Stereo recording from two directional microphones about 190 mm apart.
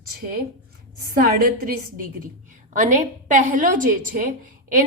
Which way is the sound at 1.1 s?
50° right (ahead or behind).